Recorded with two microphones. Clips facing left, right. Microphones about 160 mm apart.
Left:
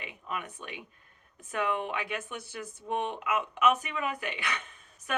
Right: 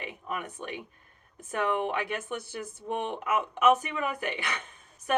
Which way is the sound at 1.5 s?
45° right (ahead or behind).